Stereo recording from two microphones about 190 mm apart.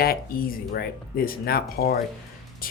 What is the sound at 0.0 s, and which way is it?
Speech, 50° left (ahead or behind).